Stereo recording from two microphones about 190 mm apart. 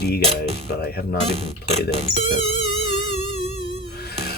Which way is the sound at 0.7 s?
55° left (ahead or behind).